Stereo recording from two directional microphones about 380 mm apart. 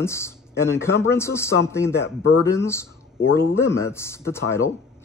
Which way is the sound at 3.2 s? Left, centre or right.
Left.